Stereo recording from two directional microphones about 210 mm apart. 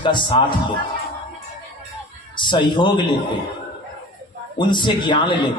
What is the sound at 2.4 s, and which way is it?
Speech, 20° left (ahead or behind).